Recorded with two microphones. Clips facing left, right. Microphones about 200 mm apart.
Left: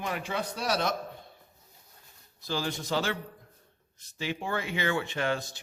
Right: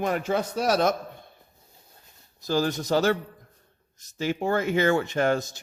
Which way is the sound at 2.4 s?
45° right (ahead or behind).